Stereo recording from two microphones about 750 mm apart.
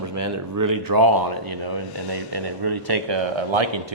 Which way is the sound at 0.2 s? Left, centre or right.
Right.